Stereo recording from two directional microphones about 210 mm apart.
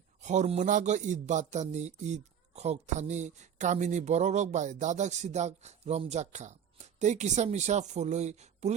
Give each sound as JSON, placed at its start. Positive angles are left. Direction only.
{"t": 0.2, "sound": "speech", "side_deg": -35}